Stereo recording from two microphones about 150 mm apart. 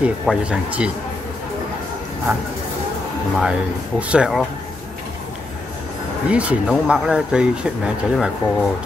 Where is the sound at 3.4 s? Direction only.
5° right (ahead or behind).